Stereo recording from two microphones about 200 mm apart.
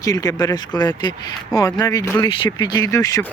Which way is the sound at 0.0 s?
15° left (ahead or behind).